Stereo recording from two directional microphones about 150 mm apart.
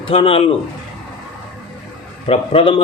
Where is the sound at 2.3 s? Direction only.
40° left (ahead or behind).